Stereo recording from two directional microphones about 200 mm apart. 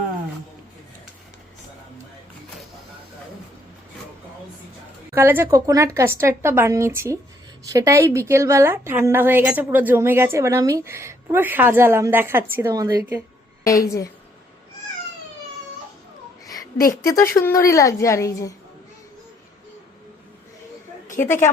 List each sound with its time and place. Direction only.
5.1 s a woman's voice: 10° right (ahead or behind)
13.7 s a woman's voice: 15° left (ahead or behind)
17.0 s a woman's voice: 15° left (ahead or behind)
21.2 s a woman's voice: 10° left (ahead or behind)